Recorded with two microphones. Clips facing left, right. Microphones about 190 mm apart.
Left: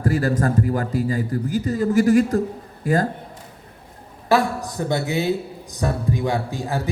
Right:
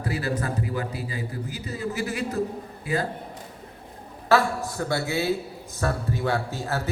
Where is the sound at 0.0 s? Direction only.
45° left (ahead or behind).